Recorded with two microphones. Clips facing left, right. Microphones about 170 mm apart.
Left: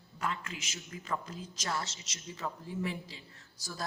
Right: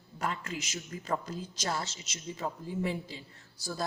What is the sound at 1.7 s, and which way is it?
Speech, 20° right (ahead or behind).